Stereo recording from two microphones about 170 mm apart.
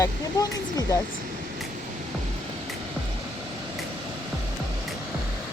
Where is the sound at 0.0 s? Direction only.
20° left (ahead or behind).